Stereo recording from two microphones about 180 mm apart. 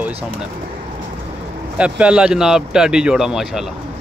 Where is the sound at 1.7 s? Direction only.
5° right (ahead or behind).